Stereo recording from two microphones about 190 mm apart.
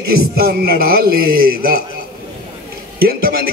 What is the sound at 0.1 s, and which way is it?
A man's voice, 55° right (ahead or behind).